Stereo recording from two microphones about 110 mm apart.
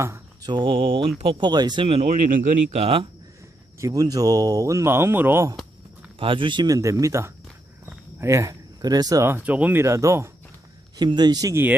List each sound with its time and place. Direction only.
0.4 s speech: 45° right (ahead or behind)
1.5 s speech: 40° right (ahead or behind)
1.9 s speech: 80° right
2.7 s speech: 60° right (ahead or behind)
3.8 s speech: 35° right (ahead or behind)
6.1 s speech: 50° right (ahead or behind); by 9.2 s 35° right (ahead or behind)
9.2 s speech: 15° right (ahead or behind)
9.8 s speech: 30° right (ahead or behind)
10.9 s speech: 40° right (ahead or behind)